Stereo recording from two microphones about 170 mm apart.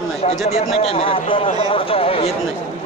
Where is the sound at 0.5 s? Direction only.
35° left (ahead or behind).